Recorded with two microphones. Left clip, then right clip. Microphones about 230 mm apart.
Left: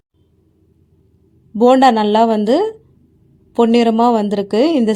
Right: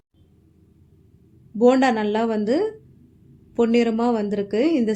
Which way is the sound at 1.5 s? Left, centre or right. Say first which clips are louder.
Left 7 dB; left.